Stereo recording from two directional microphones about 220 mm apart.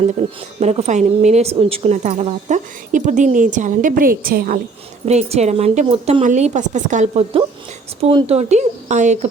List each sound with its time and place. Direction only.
0.1 s speech: 30° right (ahead or behind)
5.0 s speech: 30° right (ahead or behind)